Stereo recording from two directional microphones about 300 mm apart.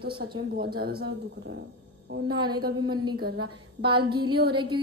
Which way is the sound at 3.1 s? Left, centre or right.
Right.